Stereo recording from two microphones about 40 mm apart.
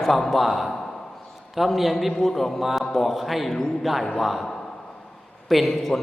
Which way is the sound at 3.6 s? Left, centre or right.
Centre.